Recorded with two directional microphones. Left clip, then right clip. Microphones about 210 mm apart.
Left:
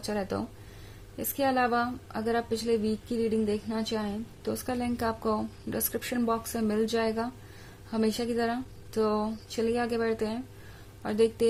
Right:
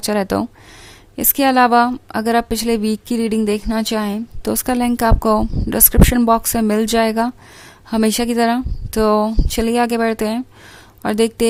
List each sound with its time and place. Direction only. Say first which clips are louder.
0.0 s a woman's voice: right 14 dB; 45° right (ahead or behind)